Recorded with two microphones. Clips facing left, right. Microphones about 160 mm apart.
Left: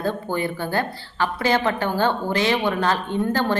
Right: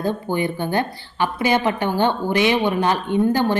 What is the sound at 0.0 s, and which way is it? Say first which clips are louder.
A woman's voice: right 2 dB; 15° right (ahead or behind).